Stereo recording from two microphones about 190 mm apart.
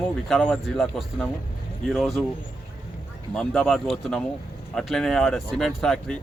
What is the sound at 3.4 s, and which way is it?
Speech, centre (ahead or behind).